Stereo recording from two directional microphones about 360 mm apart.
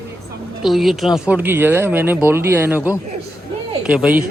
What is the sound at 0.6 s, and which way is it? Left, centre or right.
Speech, centre.